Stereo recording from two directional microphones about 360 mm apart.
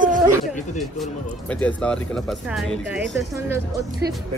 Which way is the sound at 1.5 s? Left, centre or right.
Centre.